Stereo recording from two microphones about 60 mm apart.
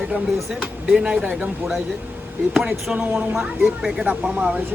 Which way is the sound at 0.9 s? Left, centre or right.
Centre.